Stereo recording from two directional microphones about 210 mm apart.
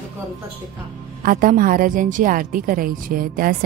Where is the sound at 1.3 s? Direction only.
40° right (ahead or behind).